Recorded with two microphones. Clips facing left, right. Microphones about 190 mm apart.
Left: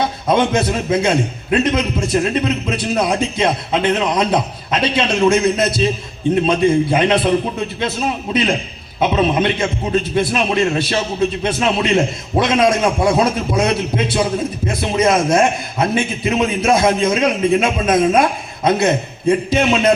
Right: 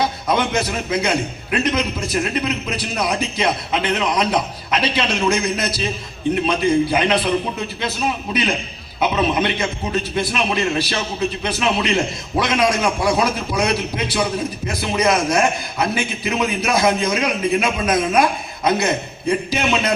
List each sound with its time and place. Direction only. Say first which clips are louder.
0.3 s a man's voice: left 7 dB; 25° left (ahead or behind)